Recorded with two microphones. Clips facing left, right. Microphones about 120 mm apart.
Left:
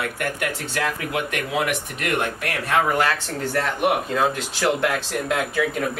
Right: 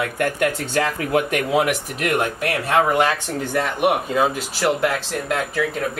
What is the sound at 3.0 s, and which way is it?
Speech, 15° right (ahead or behind).